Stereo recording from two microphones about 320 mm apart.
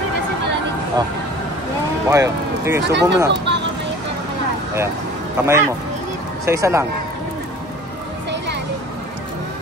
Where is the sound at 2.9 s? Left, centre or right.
Right.